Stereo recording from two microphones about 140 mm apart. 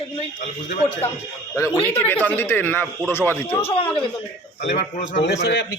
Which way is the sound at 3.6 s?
45° left (ahead or behind).